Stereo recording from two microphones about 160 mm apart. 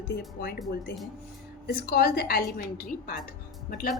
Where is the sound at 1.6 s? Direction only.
75° left (ahead or behind).